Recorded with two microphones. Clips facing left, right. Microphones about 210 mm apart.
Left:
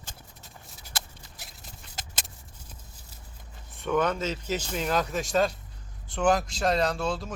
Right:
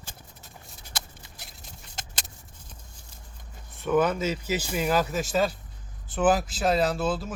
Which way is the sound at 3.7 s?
5° right (ahead or behind).